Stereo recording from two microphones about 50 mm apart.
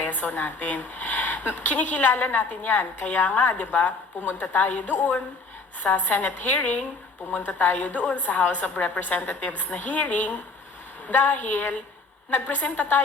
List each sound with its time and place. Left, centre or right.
0.0 s speech: left